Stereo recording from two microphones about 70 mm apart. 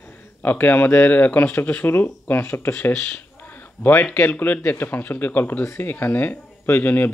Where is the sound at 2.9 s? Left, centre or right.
Centre.